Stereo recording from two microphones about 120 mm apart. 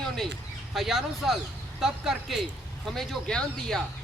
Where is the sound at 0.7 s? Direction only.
Centre (ahead or behind).